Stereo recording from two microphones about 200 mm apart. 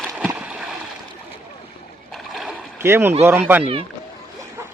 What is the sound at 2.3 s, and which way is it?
Splash, centre (ahead or behind).